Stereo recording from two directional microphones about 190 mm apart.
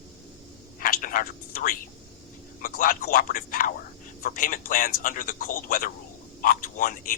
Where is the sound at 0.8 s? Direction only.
45° left (ahead or behind).